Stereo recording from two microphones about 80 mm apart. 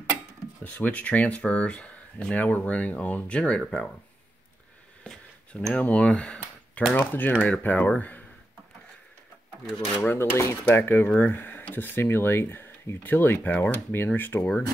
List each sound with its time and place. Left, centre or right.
0.7 s speech: centre
5.1 s a sound: centre
5.8 s speech: centre
7.0 s speech: left
10.0 s speech: left